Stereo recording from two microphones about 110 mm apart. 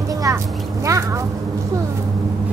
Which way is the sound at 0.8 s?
30° right (ahead or behind).